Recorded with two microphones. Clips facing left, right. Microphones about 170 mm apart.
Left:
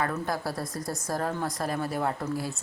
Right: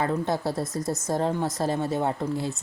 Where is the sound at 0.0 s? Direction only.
25° right (ahead or behind).